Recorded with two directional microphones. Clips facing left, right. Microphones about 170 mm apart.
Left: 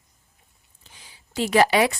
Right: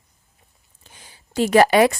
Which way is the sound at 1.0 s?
50° right (ahead or behind).